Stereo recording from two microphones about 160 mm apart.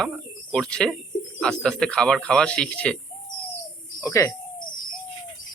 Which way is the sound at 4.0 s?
20° left (ahead or behind).